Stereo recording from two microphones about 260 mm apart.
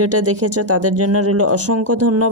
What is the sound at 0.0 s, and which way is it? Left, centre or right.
Speech, right.